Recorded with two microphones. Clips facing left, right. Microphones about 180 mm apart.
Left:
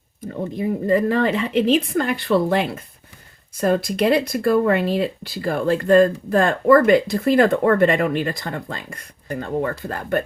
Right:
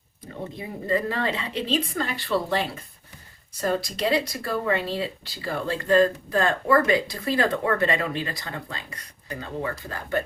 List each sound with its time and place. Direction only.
0.9 s speech: 50° left (ahead or behind)